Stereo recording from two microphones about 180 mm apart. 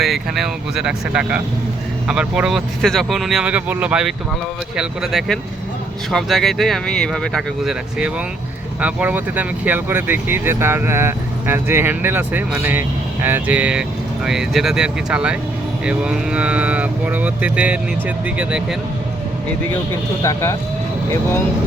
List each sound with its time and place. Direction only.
0.0 s speech: centre (ahead or behind)
20.2 s speech: 15° left (ahead or behind)